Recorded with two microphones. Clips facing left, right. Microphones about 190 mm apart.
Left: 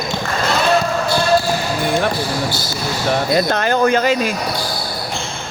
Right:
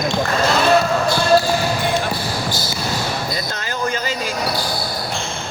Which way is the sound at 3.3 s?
65° left (ahead or behind).